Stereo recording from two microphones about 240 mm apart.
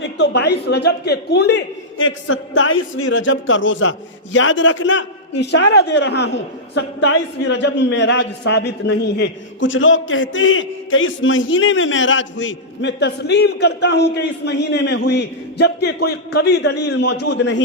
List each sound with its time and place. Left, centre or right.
0.0 s a man's voice: left